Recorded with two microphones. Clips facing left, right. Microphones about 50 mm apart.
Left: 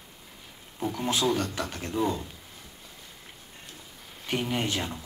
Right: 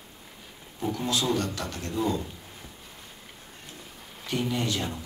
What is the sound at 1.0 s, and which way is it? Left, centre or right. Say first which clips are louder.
Speech: left 1 dB; left.